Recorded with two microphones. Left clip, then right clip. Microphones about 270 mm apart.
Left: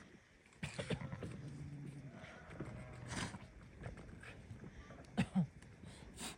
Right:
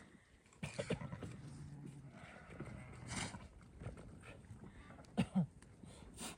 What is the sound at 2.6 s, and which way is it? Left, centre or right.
Vehicle, right.